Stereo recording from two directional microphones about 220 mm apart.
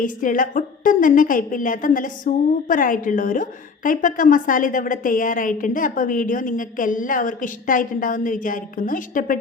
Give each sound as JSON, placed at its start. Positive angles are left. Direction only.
{"t": 0.0, "sound": "a woman's voice", "side_deg": 40}